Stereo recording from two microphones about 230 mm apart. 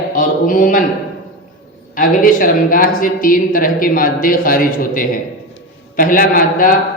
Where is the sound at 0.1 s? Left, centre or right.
Left.